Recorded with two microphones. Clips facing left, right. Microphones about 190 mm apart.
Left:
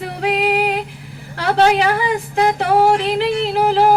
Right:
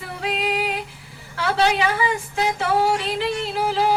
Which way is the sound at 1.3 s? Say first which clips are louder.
Left 5 dB; 40° left (ahead or behind).